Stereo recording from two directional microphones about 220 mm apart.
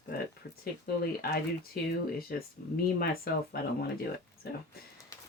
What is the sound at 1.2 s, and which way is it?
Speech, 45° left (ahead or behind).